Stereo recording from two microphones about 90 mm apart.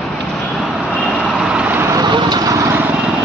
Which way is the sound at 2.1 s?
55° right (ahead or behind).